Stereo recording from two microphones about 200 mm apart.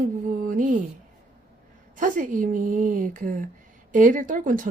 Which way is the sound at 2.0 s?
40° right (ahead or behind).